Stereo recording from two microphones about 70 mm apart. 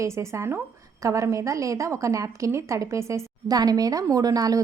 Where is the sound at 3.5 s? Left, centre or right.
Right.